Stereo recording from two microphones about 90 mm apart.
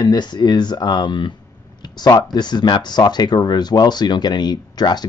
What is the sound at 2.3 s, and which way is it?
Speech, 50° left (ahead or behind).